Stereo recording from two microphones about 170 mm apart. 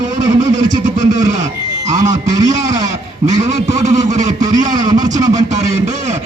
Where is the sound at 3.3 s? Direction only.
40° right (ahead or behind).